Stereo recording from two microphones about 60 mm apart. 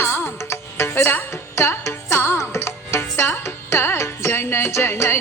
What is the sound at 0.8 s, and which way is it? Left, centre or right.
Music, left.